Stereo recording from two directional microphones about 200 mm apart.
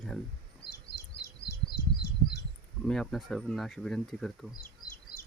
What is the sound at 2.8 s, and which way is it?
Speech, centre (ahead or behind).